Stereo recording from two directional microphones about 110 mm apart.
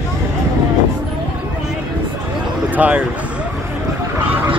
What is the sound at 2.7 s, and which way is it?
Speech, 15° right (ahead or behind).